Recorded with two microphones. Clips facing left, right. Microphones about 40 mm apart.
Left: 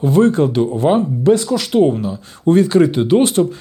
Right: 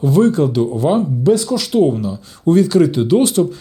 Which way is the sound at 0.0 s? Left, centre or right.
Left.